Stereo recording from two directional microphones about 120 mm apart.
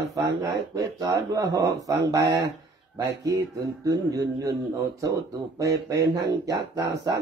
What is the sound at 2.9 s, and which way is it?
Speech, 30° right (ahead or behind).